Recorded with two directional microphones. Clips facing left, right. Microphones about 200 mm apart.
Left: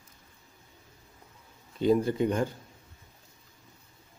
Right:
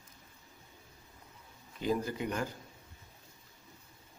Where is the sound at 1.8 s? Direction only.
25° left (ahead or behind).